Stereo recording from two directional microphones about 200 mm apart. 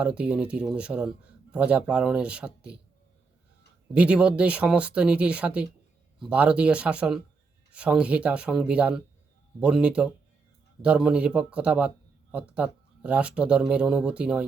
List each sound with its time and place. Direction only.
0.0 s a man's voice: 5° right (ahead or behind)
3.9 s a man's voice: 5° right (ahead or behind)